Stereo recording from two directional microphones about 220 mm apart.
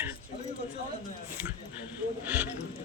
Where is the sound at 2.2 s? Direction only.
10° right (ahead or behind).